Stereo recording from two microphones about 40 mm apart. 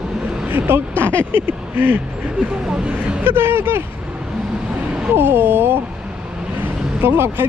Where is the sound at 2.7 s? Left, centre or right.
Right.